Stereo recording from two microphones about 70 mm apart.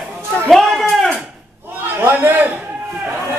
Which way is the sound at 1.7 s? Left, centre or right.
Right.